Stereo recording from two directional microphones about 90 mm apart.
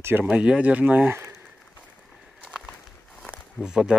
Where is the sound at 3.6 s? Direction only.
10° right (ahead or behind).